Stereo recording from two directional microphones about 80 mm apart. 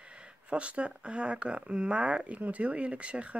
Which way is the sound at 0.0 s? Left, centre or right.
Centre.